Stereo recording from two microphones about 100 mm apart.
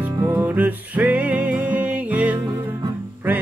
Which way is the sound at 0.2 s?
20° right (ahead or behind).